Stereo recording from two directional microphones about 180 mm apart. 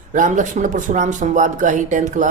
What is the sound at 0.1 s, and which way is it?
Speech, 45° right (ahead or behind).